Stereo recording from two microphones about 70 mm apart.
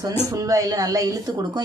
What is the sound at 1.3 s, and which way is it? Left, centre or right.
Speech, right.